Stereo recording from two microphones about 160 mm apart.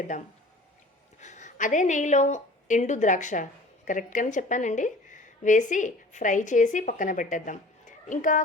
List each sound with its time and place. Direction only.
0.1 s a woman's voice: 50° left (ahead or behind)